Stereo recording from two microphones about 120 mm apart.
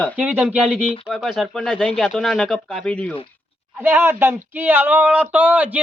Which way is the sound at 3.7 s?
20° right (ahead or behind).